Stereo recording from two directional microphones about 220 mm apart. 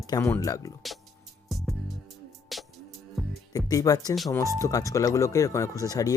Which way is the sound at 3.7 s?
15° left (ahead or behind).